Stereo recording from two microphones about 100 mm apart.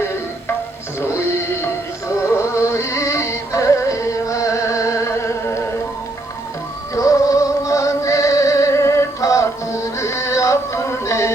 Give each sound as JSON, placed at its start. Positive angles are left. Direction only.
{"t": 1.0, "sound": "music", "side_deg": 25}
{"t": 6.9, "sound": "music", "side_deg": 30}